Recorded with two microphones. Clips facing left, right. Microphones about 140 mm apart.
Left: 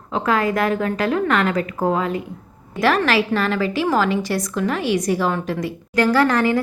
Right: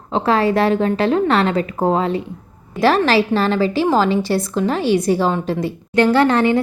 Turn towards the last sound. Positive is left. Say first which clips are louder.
# right 3 dB
turn(degrees=-25)  # may be behind; listen again after turning